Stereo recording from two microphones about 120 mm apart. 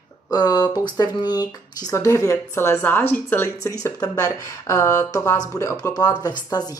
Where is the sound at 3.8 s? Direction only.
30° left (ahead or behind).